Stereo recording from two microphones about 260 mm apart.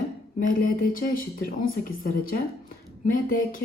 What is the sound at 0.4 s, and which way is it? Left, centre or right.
Speech, left.